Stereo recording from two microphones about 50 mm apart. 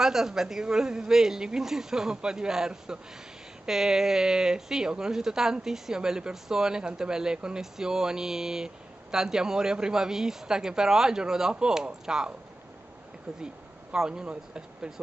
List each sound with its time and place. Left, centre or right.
0.0 s a woman's voice: centre
13.9 s a woman's voice: centre